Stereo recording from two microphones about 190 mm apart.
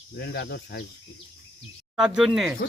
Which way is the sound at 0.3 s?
60° left (ahead or behind).